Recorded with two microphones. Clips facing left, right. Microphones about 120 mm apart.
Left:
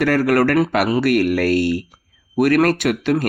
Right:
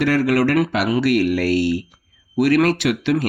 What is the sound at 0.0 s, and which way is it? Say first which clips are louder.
Speech: left 1 dB; 45° left (ahead or behind).